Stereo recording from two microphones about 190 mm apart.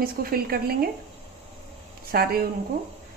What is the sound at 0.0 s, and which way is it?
Speech, 50° right (ahead or behind).